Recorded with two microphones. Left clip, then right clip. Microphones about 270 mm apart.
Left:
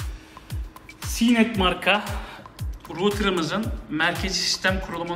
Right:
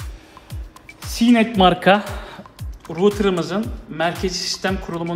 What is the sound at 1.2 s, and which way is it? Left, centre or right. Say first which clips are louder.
Speech: right 6 dB; right.